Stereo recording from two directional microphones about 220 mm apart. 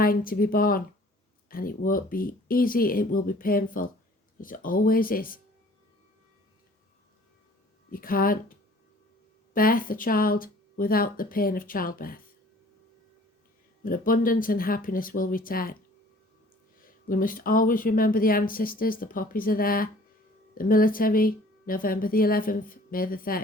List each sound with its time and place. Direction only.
0.0 s speech: 40° left (ahead or behind)
7.9 s speech: 40° left (ahead or behind)
13.8 s speech: 40° left (ahead or behind)
16.8 s speech: 40° left (ahead or behind)